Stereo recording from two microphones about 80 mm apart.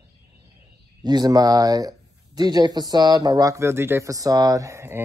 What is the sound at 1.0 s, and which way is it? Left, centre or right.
A man's voice, right.